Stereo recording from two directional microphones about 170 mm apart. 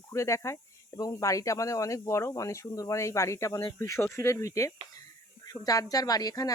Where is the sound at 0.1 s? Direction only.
15° left (ahead or behind).